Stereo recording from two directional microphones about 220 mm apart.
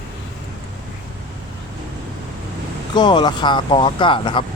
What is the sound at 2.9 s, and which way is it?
Speech, 20° left (ahead or behind).